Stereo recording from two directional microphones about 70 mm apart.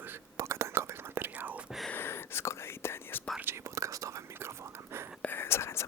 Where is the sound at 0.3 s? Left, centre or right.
Right.